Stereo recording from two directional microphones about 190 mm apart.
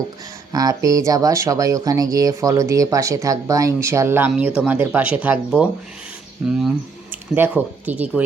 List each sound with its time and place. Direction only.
0.5 s speech: 20° right (ahead or behind)
7.1 s speech: 10° right (ahead or behind)